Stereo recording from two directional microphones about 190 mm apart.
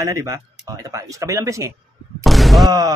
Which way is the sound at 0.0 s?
15° right (ahead or behind).